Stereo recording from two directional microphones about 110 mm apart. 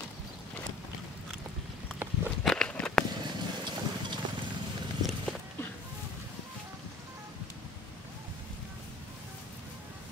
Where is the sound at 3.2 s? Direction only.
45° right (ahead or behind).